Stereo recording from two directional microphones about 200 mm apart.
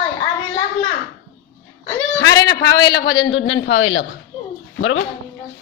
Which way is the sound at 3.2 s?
75° left (ahead or behind).